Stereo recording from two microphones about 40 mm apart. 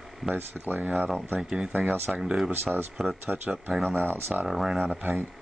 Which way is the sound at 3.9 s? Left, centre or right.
Right.